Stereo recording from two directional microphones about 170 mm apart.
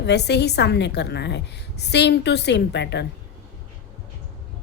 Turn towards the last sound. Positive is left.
turn(degrees=90)